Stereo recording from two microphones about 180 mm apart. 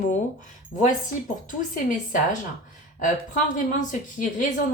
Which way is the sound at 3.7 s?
45° left (ahead or behind).